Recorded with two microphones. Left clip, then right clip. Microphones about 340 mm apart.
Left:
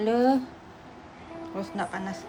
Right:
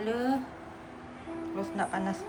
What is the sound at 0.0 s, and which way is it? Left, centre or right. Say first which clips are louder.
Speech: left 8 dB; centre.